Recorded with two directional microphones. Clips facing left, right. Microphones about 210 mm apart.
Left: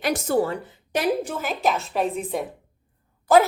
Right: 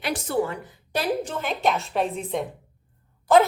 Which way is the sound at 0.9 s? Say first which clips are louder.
Left 2 dB; 10° left (ahead or behind).